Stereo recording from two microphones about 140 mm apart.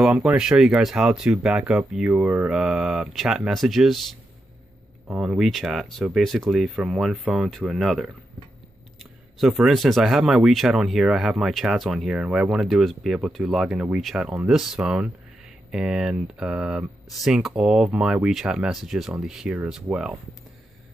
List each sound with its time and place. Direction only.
0.0 s speech: 5° right (ahead or behind)
9.4 s speech: 5° right (ahead or behind)